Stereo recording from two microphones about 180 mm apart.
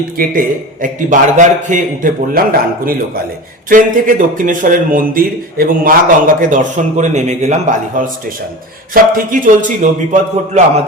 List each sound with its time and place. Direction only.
0.2 s a man's voice: 50° right (ahead or behind)